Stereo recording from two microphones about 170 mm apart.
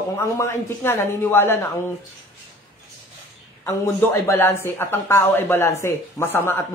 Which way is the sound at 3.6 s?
15° left (ahead or behind).